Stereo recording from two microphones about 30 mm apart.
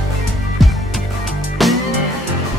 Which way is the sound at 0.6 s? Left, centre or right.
Centre.